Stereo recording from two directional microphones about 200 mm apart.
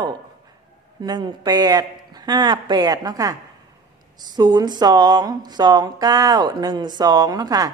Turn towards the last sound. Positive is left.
turn(degrees=-20)  # may be behind; listen again after turning